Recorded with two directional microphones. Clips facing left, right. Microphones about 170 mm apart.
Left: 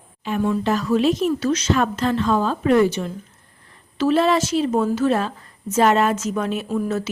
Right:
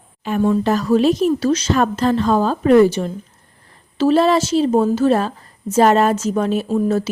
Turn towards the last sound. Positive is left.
turn(degrees=-30)  # may be behind; listen again after turning